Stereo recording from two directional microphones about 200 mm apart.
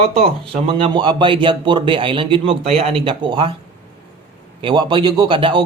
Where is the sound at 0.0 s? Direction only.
30° right (ahead or behind).